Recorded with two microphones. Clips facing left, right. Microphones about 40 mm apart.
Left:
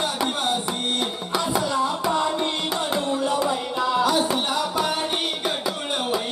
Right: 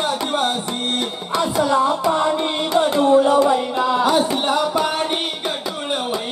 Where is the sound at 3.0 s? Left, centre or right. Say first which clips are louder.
Right 12 dB; right.